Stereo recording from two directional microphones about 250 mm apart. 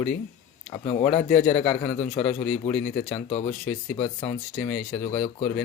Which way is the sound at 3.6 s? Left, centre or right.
Centre.